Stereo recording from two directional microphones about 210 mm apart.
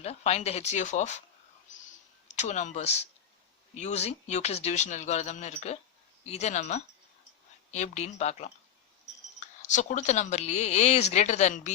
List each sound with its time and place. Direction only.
0.0 s speech: 30° left (ahead or behind)
2.2 s speech: 35° left (ahead or behind)
9.6 s speech: 35° left (ahead or behind)